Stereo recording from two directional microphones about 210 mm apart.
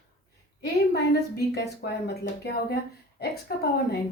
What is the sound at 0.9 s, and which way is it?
A woman's voice, 50° left (ahead or behind).